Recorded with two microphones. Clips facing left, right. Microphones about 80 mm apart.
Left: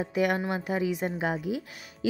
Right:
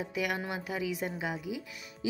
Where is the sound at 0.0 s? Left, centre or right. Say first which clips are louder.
Left 7 dB; left.